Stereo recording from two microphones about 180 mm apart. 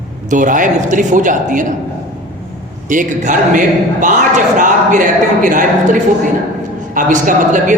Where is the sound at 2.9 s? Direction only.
45° right (ahead or behind).